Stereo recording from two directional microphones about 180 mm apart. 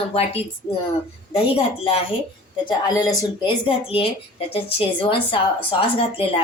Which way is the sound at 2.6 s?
20° left (ahead or behind).